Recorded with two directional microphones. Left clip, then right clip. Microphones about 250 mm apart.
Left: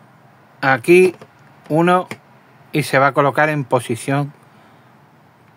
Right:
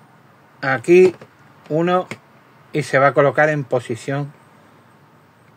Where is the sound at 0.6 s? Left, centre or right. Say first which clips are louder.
Left 1 dB; centre.